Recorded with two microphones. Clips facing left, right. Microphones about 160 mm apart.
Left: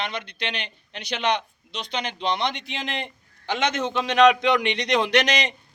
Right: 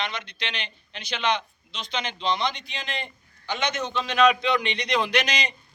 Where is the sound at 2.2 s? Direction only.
65° left (ahead or behind).